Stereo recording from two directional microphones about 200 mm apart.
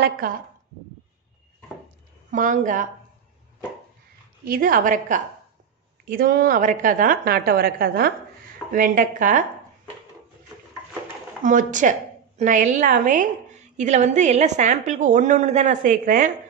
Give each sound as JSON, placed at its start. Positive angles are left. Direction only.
{"t": 0.2, "sound": "a woman's voice", "side_deg": -45}
{"t": 2.3, "sound": "a woman's voice", "side_deg": -40}
{"t": 4.5, "sound": "a woman's voice", "side_deg": -45}
{"t": 11.4, "sound": "a woman's voice", "side_deg": -40}